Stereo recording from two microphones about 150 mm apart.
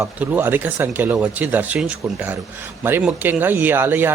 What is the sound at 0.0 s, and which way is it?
Speech, 15° right (ahead or behind).